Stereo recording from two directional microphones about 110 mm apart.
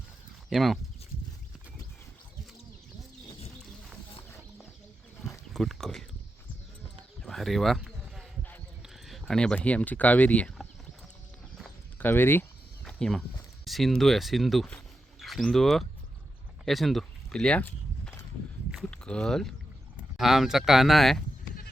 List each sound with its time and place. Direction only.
0.5 s speech: centre (ahead or behind)
5.5 s speech: centre (ahead or behind)
7.2 s a sound: 5° left (ahead or behind)
9.0 s speech: centre (ahead or behind)
11.9 s speech: 20° left (ahead or behind)
12.8 s cricket: 5° left (ahead or behind)
13.7 s speech: centre (ahead or behind)
16.6 s a sound: centre (ahead or behind); by 18.3 s 20° left (ahead or behind)
18.7 s a sound: 5° left (ahead or behind)
20.1 s speech: centre (ahead or behind)